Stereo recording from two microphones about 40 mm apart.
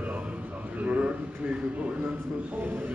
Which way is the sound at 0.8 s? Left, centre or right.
Right.